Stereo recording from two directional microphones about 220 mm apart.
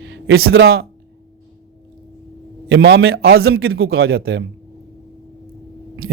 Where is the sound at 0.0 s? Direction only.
55° right (ahead or behind).